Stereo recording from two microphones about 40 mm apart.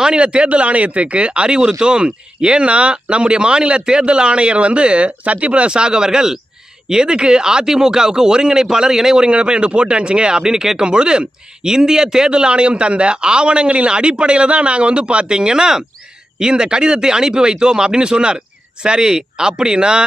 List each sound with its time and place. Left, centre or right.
0.0 s speech: right
10.4 s speech: centre